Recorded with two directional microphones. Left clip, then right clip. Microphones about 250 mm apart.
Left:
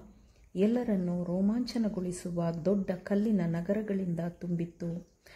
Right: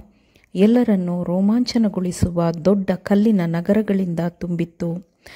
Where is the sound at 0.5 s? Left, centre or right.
Right.